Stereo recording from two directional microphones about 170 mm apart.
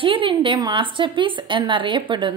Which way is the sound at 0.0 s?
30° right (ahead or behind).